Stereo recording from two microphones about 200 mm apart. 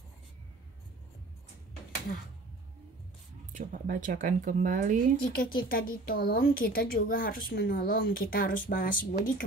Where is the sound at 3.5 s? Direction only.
40° right (ahead or behind).